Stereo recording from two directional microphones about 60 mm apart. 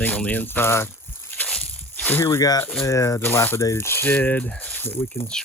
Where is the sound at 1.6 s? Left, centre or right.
Left.